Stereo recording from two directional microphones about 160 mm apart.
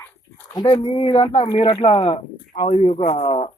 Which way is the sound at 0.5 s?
25° left (ahead or behind).